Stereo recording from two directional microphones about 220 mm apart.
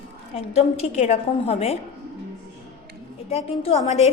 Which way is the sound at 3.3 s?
30° left (ahead or behind).